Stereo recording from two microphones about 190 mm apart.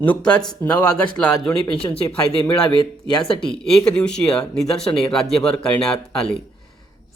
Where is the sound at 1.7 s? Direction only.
30° left (ahead or behind).